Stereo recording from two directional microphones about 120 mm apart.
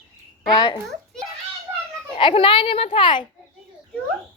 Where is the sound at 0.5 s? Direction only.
40° left (ahead or behind).